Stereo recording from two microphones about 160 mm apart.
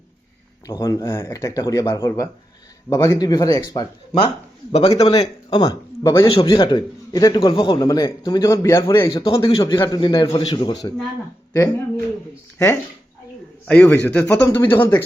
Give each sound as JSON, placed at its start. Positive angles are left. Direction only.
{"t": 0.8, "sound": "a man's voice", "side_deg": 20}
{"t": 4.7, "sound": "a man's voice", "side_deg": 40}
{"t": 12.5, "sound": "speech", "side_deg": 10}